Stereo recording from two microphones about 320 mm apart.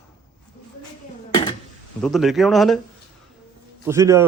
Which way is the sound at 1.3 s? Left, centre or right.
Centre.